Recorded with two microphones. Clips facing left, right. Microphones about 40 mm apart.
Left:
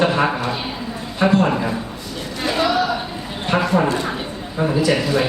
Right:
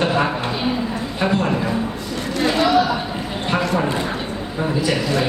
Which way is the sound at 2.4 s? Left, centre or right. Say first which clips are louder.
Right 2 dB; centre.